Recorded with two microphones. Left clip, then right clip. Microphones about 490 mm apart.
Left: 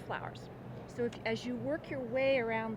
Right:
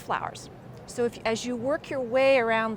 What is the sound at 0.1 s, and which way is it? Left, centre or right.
A woman's voice, right.